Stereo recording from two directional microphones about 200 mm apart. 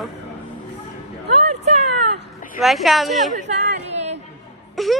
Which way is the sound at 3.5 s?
35° right (ahead or behind).